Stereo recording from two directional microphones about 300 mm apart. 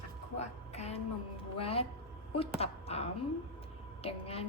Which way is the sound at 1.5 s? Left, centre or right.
Centre.